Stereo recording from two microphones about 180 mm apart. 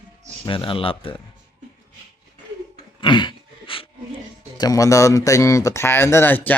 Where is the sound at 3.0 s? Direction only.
25° left (ahead or behind).